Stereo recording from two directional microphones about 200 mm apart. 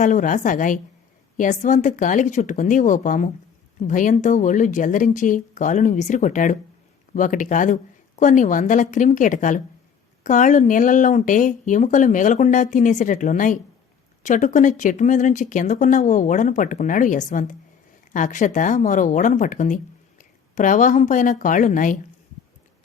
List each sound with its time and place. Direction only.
0.0 s speech: 40° left (ahead or behind)